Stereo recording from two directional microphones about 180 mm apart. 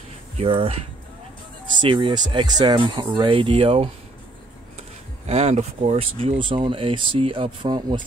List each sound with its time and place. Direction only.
0.4 s speech: 35° right (ahead or behind)
1.8 s speech: 25° right (ahead or behind)